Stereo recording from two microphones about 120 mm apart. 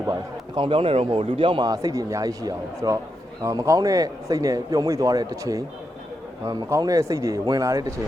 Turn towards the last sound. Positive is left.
turn(degrees=-30)  # may be behind; listen again after turning